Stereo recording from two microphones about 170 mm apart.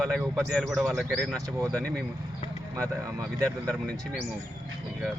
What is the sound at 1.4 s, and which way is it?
Speech, 20° right (ahead or behind).